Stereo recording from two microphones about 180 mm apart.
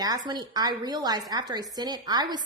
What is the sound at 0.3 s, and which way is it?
A woman's voice, 20° right (ahead or behind).